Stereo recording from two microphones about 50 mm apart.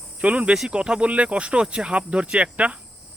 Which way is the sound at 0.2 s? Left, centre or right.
Right.